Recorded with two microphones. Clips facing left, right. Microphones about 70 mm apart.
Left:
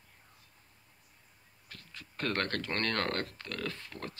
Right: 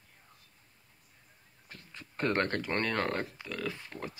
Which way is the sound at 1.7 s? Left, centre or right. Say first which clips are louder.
Right 1 dB; right.